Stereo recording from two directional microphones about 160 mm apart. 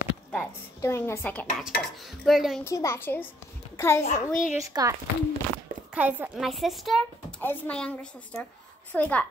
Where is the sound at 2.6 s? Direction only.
20° left (ahead or behind).